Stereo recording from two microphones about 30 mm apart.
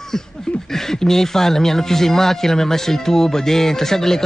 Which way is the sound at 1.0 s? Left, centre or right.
Centre.